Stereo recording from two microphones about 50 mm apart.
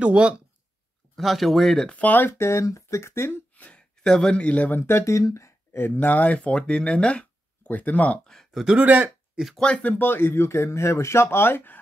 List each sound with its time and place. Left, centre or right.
0.0 s speech: right
1.1 s speech: centre
1.9 s speech: left
2.2 s speech: left
4.0 s speech: centre; by 4.7 s left
4.7 s speech: left
5.0 s speech: left
5.7 s speech: left
5.9 s speech: left
8.6 s speech: right
9.8 s speech: left